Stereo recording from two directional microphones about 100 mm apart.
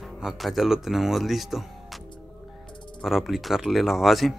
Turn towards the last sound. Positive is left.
turn(degrees=0)  # may be behind; listen again after turning